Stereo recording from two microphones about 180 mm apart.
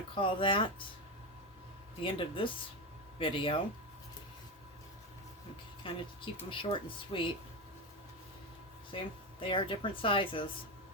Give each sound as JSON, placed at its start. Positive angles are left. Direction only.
{"t": 0.1, "sound": "speech", "side_deg": 30}
{"t": 2.0, "sound": "speech", "side_deg": 30}
{"t": 5.8, "sound": "speech", "side_deg": 30}
{"t": 8.9, "sound": "speech", "side_deg": 30}